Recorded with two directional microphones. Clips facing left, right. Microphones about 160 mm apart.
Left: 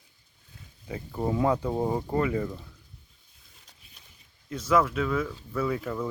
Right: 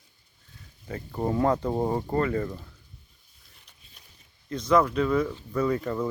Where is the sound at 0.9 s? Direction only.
10° left (ahead or behind).